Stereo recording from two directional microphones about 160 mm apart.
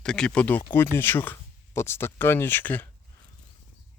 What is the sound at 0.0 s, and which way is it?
Speech, 5° left (ahead or behind).